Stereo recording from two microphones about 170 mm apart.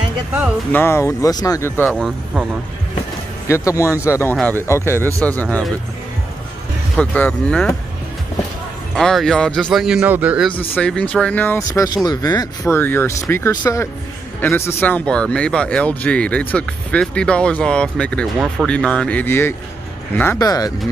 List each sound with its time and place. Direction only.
0.7 s speech: 15° left (ahead or behind)
1.9 s a man's voice: centre (ahead or behind)
3.4 s speech: 15° left (ahead or behind)
7.0 s speech: 10° left (ahead or behind)
8.9 s a man's voice: 5° left (ahead or behind)
10.7 s speech: 5° left (ahead or behind)